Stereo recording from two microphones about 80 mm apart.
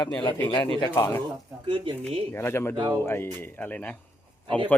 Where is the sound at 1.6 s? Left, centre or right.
Right.